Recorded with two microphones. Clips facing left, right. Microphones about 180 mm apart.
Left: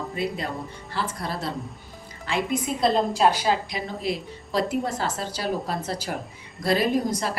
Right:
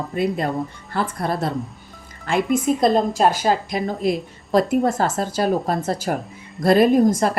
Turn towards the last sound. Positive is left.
turn(degrees=-50)  # may be behind; listen again after turning